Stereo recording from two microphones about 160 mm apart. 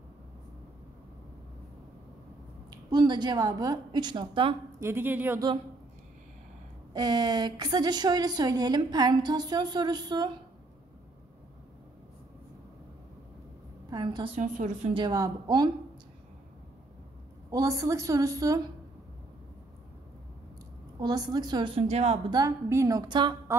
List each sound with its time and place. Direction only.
2.7 s a woman's voice: 25° right (ahead or behind)
4.7 s speech: 15° right (ahead or behind)
6.9 s a woman's voice: 25° right (ahead or behind)
13.8 s a sound: 25° right (ahead or behind)
14.3 s a woman's voice: 50° right (ahead or behind)
15.0 s a woman's voice: 25° right (ahead or behind)
17.5 s a woman's voice: 20° right (ahead or behind)
21.0 s a woman's voice: 25° right (ahead or behind); by 22.2 s 40° right (ahead or behind)
22.3 s a woman's voice: 20° right (ahead or behind)